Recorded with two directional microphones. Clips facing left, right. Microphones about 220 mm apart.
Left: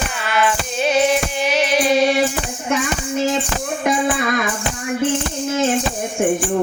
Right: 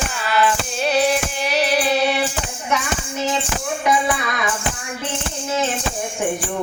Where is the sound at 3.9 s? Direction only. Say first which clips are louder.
Left 2 dB; 50° left (ahead or behind).